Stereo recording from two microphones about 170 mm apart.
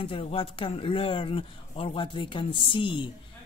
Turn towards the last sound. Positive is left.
turn(degrees=30)  # may be behind; listen again after turning